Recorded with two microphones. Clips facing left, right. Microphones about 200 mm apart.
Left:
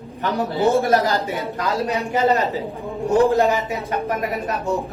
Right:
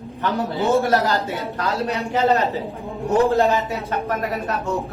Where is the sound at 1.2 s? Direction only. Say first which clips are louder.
Left 1 dB; 15° left (ahead or behind).